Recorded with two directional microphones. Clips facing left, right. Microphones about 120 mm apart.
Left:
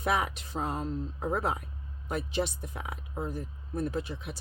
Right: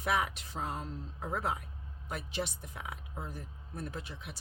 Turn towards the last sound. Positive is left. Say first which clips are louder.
# left 9 dB
turn(degrees=30)  # may be behind; listen again after turning